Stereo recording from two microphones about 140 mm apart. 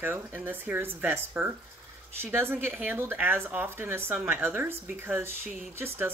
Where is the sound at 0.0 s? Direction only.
15° right (ahead or behind).